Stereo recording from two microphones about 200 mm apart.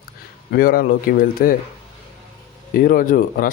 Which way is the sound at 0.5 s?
45° left (ahead or behind).